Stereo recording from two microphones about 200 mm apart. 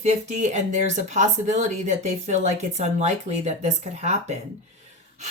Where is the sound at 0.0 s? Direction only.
35° right (ahead or behind).